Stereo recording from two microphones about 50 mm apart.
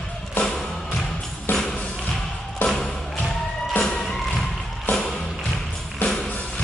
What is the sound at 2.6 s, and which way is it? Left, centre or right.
Music, left.